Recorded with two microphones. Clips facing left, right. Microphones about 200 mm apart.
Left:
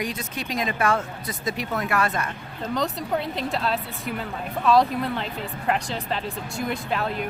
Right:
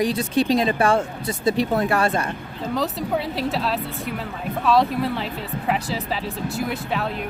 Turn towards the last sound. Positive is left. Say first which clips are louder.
# right 1 dB
turn(degrees=0)  # may be behind; listen again after turning